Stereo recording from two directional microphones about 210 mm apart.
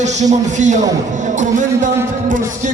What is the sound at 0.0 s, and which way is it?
A man's voice, 35° right (ahead or behind).